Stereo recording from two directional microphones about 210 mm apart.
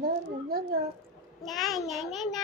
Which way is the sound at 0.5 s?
45° right (ahead or behind).